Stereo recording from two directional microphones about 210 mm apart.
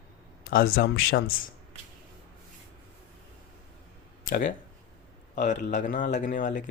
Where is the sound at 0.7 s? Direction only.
45° left (ahead or behind).